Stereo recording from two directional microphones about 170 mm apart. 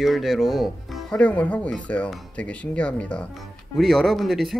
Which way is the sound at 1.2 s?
10° left (ahead or behind).